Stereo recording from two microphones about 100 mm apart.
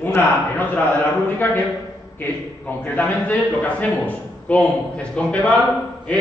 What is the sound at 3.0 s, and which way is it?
A man's voice, 15° left (ahead or behind).